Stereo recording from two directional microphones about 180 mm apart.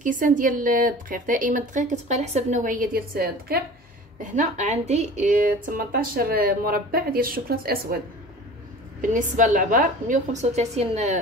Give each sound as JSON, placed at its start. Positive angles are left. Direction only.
{"t": 0.0, "sound": "a woman's voice", "side_deg": -45}
{"t": 4.2, "sound": "a woman's voice", "side_deg": -45}
{"t": 9.1, "sound": "a woman's voice", "side_deg": -45}